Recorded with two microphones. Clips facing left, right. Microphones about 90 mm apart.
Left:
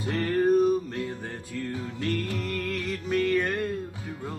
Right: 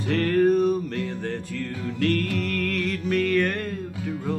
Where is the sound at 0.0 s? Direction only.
15° left (ahead or behind).